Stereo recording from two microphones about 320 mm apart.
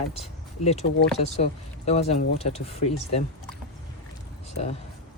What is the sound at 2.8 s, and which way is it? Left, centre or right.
Speech, left.